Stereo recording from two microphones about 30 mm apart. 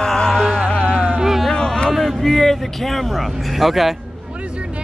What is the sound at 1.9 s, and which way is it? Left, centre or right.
Speech, centre.